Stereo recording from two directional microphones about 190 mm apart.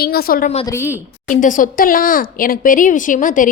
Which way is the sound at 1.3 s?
45° left (ahead or behind).